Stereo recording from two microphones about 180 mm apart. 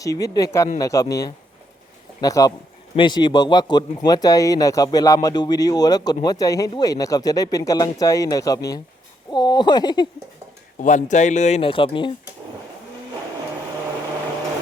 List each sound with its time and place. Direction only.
0.0 s speech: 20° left (ahead or behind)
10.8 s speech: 45° left (ahead or behind); by 12.1 s 30° left (ahead or behind)